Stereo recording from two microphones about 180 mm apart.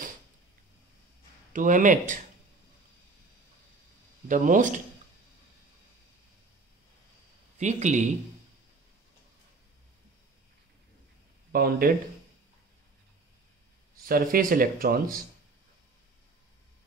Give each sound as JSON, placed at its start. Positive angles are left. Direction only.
{"t": 1.5, "sound": "speech", "side_deg": -45}
{"t": 4.3, "sound": "speech", "side_deg": -45}
{"t": 7.5, "sound": "a man's voice", "side_deg": -40}
{"t": 11.5, "sound": "speech", "side_deg": -55}
{"t": 14.0, "sound": "speech", "side_deg": -55}